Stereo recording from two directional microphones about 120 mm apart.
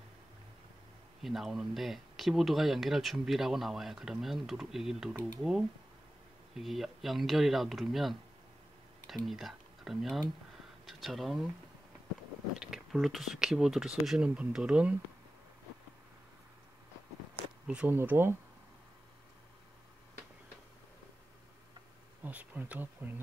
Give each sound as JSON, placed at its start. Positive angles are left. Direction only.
{"t": 1.2, "sound": "speech", "side_deg": 0}
{"t": 6.5, "sound": "speech", "side_deg": 0}
{"t": 12.5, "sound": "speech", "side_deg": 0}
{"t": 17.6, "sound": "speech", "side_deg": -15}
{"t": 22.2, "sound": "speech", "side_deg": -15}